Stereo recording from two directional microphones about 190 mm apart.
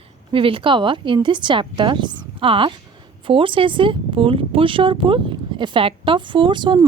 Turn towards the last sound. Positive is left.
turn(degrees=-25)  # may be behind; listen again after turning